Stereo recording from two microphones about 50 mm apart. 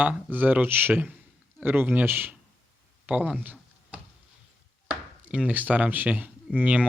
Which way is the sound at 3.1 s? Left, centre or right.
Right.